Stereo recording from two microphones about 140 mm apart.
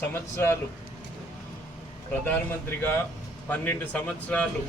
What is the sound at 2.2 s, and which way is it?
A man's voice, 15° left (ahead or behind).